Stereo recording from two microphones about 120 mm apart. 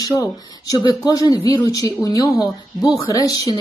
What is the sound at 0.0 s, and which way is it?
Speech, 25° left (ahead or behind).